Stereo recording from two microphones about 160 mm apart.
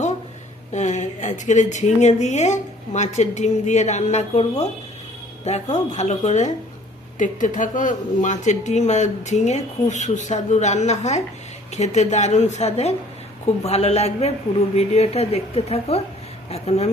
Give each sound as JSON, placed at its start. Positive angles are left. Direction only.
{"t": 0.7, "sound": "a woman's voice", "side_deg": 50}